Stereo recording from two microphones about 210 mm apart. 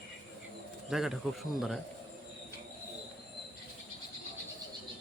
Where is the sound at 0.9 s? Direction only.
Centre (ahead or behind).